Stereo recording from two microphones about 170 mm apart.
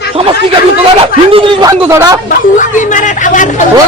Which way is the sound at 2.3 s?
50° left (ahead or behind).